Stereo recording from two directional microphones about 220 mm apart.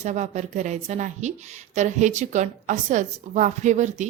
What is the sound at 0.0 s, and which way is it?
A woman's voice, 30° right (ahead or behind).